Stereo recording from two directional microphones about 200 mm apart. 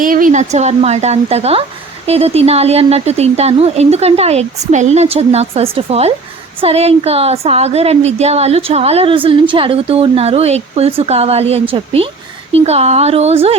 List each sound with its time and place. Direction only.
0.0 s speech: 45° right (ahead or behind)